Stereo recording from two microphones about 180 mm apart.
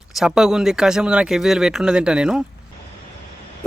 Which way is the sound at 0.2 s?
5° right (ahead or behind).